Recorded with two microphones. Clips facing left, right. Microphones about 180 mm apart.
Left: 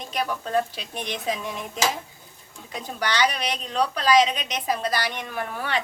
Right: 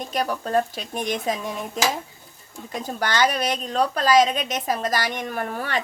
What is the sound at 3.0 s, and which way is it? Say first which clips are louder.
A woman's voice: right 2 dB; 45° right (ahead or behind).